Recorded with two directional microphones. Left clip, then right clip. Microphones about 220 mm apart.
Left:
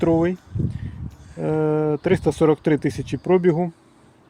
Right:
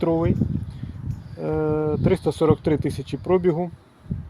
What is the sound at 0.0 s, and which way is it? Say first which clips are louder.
Speech: left 3 dB; 20° left (ahead or behind).